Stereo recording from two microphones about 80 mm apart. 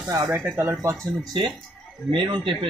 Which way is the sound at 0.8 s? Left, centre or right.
Right.